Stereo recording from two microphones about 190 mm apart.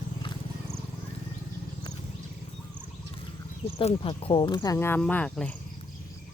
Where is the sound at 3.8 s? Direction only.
30° left (ahead or behind); by 5.5 s 5° left (ahead or behind).